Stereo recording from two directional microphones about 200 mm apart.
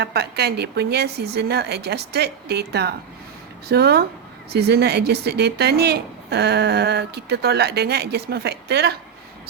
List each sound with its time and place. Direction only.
0.0 s a woman's voice: 55° right (ahead or behind)